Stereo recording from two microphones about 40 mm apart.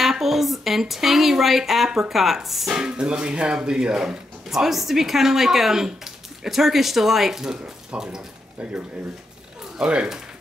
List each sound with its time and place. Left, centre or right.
0.0 s speech: centre
2.7 s speech: centre
7.9 s speech: right